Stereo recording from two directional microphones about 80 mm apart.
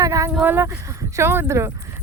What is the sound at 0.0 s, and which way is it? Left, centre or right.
Speech, right.